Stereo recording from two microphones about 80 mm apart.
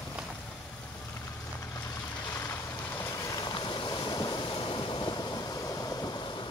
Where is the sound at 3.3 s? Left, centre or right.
Left.